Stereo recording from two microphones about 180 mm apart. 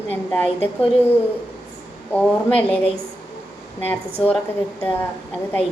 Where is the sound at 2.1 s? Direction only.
10° left (ahead or behind).